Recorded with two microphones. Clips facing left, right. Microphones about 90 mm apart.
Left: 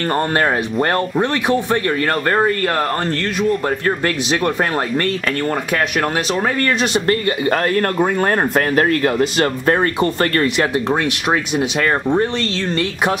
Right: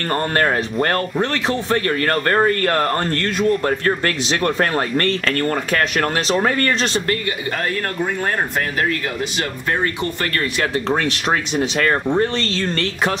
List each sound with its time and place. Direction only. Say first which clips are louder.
0.9 s speech: left 3 dB; 20° left (ahead or behind)
7.2 s speech: left 6 dB; 45° left (ahead or behind)
10.9 s speech: left 1 dB; 5° left (ahead or behind)